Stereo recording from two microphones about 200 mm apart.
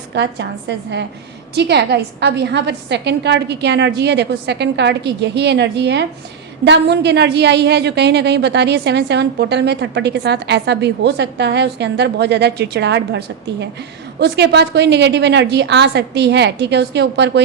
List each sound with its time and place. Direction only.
0.1 s a woman's voice: 60° right (ahead or behind)